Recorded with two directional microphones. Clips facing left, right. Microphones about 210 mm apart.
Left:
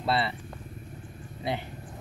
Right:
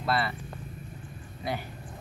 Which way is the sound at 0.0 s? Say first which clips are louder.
Left 1 dB; 25° left (ahead or behind).